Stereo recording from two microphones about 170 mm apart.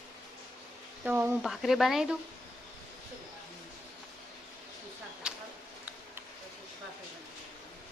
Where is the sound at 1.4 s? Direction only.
Centre (ahead or behind).